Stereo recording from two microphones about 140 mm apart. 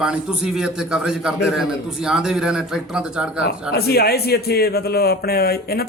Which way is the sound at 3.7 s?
90° left.